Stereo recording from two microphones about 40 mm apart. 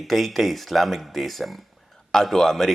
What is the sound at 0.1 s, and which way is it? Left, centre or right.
Speech, centre.